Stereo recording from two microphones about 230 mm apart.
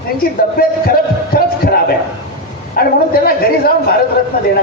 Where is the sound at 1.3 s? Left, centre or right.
Left.